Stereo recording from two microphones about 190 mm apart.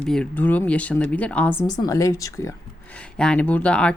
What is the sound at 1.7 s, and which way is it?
Speech, 20° left (ahead or behind).